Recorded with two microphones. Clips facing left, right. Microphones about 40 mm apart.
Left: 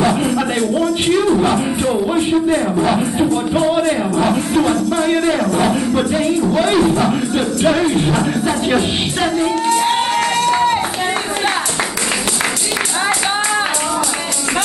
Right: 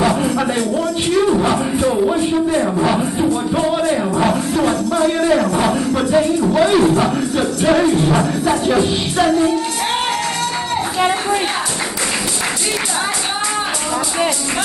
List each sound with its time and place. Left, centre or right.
0.0 s music: centre
2.6 s music: centre
3.5 s music: centre
4.9 s speech: centre
5.6 s music: centre
7.1 s music: centre
8.1 s music: centre
8.7 s music: centre